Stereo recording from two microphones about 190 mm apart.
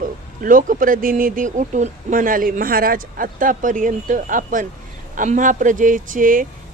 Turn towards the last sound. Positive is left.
turn(degrees=-45)  # may be behind; listen again after turning